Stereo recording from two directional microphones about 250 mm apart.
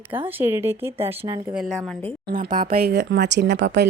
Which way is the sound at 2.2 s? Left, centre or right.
Right.